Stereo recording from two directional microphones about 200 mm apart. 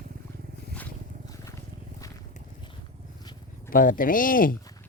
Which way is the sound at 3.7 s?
45° left (ahead or behind).